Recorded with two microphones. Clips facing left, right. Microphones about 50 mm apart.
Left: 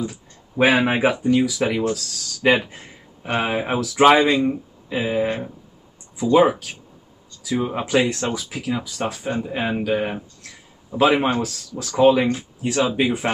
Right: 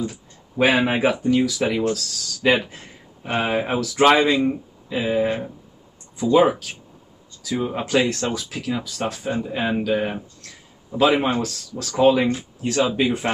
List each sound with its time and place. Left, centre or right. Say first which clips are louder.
0.0 s speech: even; centre
6.3 s speech: left 1 dB; centre